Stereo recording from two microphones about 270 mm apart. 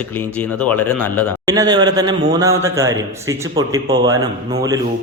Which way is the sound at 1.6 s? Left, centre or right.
Centre.